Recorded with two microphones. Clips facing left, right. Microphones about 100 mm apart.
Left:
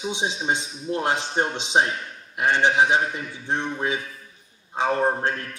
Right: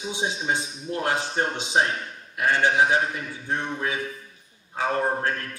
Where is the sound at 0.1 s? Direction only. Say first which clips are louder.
Even; 20° left (ahead or behind).